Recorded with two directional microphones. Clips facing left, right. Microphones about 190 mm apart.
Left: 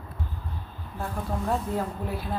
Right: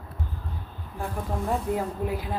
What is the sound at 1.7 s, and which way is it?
Speech, 15° right (ahead or behind).